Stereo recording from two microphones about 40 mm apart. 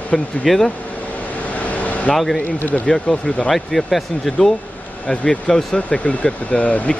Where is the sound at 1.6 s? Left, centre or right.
Left.